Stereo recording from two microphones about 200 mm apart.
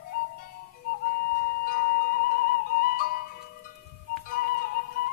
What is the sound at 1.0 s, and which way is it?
Music, 45° left (ahead or behind).